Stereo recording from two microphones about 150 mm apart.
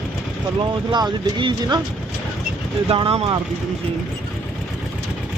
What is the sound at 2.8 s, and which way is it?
Speech, 35° right (ahead or behind).